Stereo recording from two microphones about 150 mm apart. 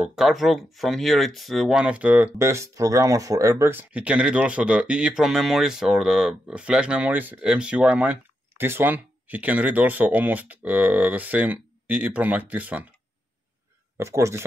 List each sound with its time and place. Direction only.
0.1 s speech: centre (ahead or behind)
13.9 s speech: 20° right (ahead or behind)